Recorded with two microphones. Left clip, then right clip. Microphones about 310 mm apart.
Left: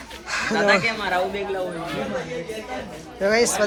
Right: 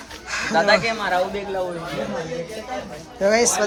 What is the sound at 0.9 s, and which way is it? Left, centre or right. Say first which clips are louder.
Speech: right 1 dB; right.